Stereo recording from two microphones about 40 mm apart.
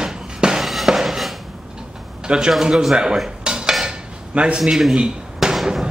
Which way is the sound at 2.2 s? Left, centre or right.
Right.